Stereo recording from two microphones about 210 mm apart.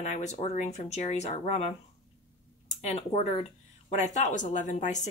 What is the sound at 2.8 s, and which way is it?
Speech, 30° left (ahead or behind).